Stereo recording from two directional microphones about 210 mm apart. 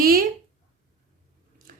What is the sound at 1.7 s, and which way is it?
Biting, 40° right (ahead or behind).